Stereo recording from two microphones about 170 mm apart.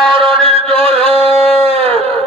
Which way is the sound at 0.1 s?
30° right (ahead or behind).